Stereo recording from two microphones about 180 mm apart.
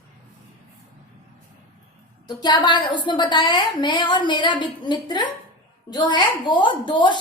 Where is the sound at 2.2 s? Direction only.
25° left (ahead or behind).